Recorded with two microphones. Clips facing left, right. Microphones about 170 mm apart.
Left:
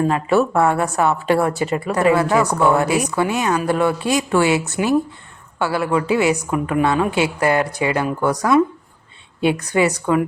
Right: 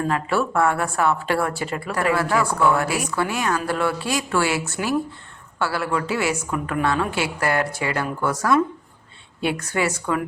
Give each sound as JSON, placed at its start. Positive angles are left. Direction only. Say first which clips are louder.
{"t": 0.0, "sound": "a woman's voice", "louder": "left 6 dB", "side_deg": 20}